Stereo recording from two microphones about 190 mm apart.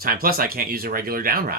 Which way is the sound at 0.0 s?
50° right (ahead or behind).